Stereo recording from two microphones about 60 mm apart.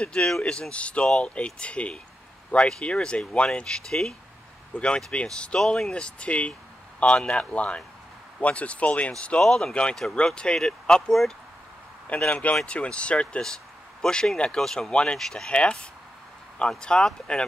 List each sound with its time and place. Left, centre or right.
0.0 s speech: centre
9.4 s speech: centre
12.3 s speech: left